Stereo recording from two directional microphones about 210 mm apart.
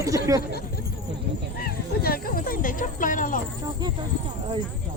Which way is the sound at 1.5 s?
45° left (ahead or behind).